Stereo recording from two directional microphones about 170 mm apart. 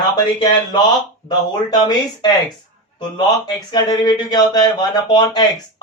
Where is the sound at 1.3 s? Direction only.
25° left (ahead or behind).